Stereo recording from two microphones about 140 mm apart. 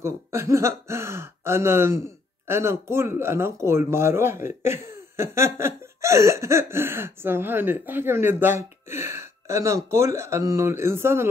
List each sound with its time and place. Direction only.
0.0 s speech: 20° right (ahead or behind)